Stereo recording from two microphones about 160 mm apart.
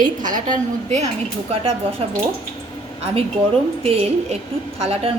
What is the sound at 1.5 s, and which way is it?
Speech, 35° right (ahead or behind).